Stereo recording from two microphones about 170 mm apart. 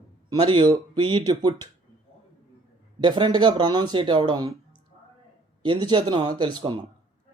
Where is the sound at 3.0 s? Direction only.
25° right (ahead or behind).